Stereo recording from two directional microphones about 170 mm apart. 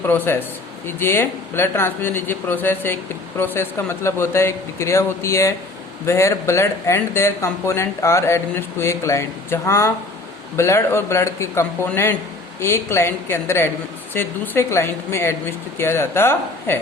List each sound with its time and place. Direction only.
0.0 s speech: 10° left (ahead or behind)